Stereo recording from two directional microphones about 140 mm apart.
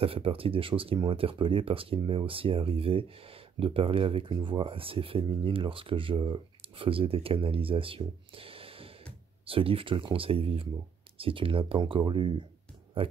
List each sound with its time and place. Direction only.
0.0 s speech: 40° right (ahead or behind)